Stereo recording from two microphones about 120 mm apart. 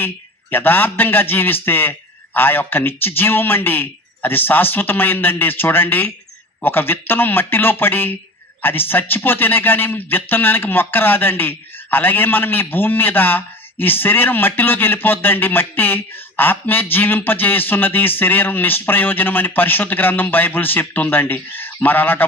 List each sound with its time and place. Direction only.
0.5 s a man's voice: 15° left (ahead or behind)